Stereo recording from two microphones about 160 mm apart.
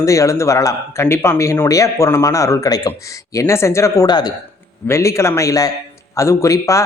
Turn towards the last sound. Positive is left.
turn(degrees=20)  # may be behind; listen again after turning